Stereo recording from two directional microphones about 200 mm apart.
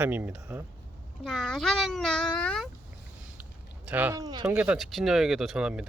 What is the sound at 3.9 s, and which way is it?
Speech, 10° right (ahead or behind).